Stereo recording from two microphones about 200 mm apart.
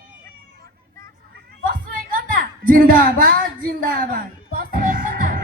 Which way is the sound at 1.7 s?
45° right (ahead or behind).